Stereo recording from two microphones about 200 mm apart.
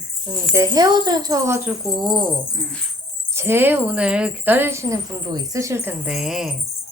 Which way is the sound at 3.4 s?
10° right (ahead or behind).